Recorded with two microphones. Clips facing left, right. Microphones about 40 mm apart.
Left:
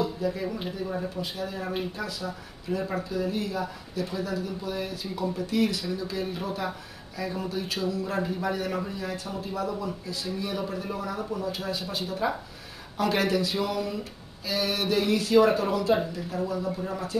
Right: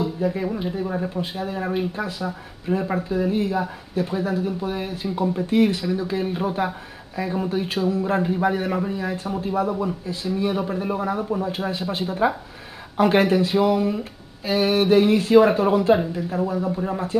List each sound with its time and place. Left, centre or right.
0.0 s speech: right